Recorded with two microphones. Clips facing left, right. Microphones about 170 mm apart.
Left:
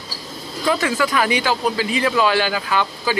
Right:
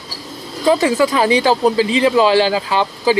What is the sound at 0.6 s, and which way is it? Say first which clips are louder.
Speech: right 6 dB; 25° right (ahead or behind).